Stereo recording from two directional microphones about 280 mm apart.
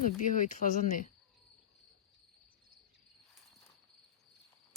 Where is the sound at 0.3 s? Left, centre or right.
Left.